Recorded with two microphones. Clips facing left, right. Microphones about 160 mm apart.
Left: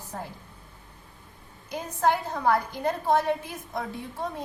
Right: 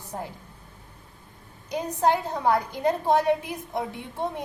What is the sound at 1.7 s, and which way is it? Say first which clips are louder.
A woman's voice: right 2 dB; 20° right (ahead or behind).